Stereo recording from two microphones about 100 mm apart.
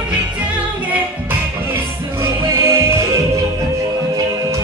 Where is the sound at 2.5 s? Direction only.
30° right (ahead or behind).